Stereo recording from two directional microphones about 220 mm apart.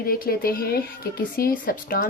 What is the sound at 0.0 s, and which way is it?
Speech, 40° left (ahead or behind).